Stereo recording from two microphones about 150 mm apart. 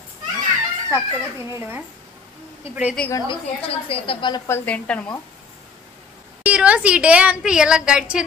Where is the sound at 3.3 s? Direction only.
40° left (ahead or behind).